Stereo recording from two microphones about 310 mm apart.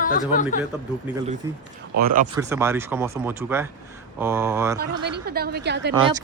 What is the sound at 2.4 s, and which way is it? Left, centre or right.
Speech, centre.